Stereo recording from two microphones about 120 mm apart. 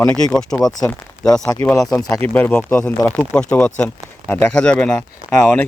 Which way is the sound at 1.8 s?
5° left (ahead or behind).